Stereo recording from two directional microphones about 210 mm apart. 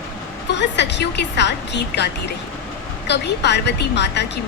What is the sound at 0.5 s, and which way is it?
A woman's voice, 55° left (ahead or behind).